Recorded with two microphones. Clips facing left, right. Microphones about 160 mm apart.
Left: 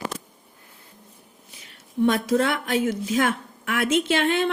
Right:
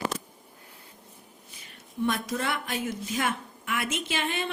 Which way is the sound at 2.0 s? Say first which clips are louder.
Left 8 dB; 80° left.